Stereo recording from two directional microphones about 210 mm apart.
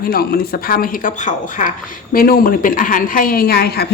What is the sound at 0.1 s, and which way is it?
A woman's voice, 45° left (ahead or behind).